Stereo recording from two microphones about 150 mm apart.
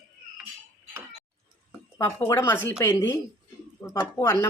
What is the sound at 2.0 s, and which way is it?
A woman's voice, 20° left (ahead or behind).